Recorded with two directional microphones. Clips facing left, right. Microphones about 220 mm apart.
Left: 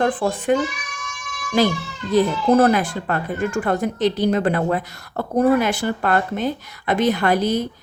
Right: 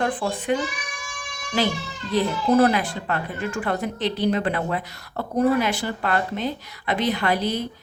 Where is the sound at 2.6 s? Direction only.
45° left (ahead or behind).